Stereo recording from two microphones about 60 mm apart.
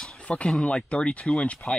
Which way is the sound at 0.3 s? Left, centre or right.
Centre.